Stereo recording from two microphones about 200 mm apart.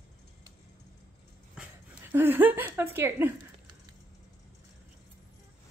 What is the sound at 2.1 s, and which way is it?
A woman's voice, 10° right (ahead or behind).